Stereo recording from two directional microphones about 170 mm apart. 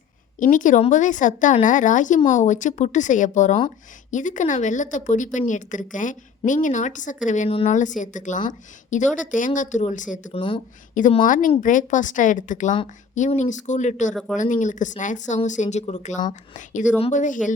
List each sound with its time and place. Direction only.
0.3 s speech: 50° left (ahead or behind)
10.3 s speech: 30° left (ahead or behind)
11.0 s speech: 50° left (ahead or behind)